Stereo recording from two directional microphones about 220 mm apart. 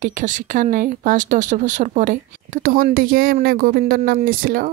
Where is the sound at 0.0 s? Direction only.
35° right (ahead or behind).